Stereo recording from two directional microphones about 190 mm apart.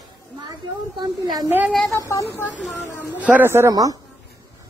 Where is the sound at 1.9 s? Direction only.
15° left (ahead or behind).